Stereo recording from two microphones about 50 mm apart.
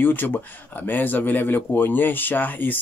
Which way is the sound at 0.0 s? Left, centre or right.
Left.